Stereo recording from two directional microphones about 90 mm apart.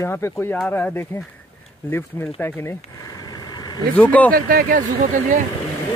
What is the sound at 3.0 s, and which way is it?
Vehicle, 45° left (ahead or behind).